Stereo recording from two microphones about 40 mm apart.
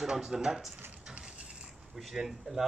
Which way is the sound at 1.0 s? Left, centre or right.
Right.